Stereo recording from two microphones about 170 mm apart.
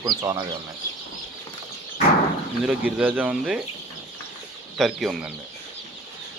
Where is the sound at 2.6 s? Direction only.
10° right (ahead or behind).